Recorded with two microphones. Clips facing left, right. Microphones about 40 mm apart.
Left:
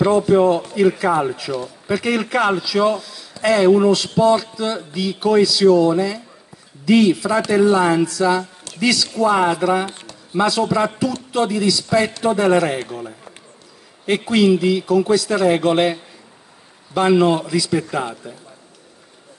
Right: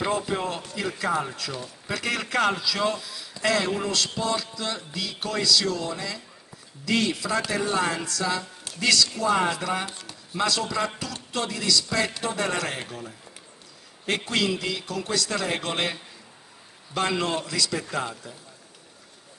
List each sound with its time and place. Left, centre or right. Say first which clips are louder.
0.0 s a man's voice: left 13 dB; centre
14.0 s a man's voice: left 10 dB; centre